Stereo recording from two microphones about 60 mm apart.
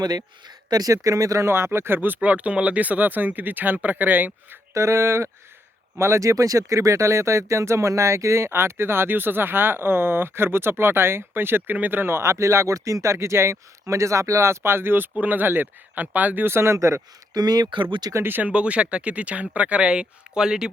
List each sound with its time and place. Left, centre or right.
0.7 s speech: right
1.5 s speech: right
4.7 s speech: right
17.3 s speech: right
18.2 s speech: right
18.4 s speech: centre